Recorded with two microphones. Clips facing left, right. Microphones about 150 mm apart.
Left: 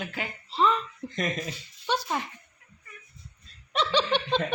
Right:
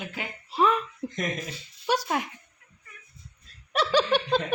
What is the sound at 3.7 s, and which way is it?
Speech, 10° right (ahead or behind).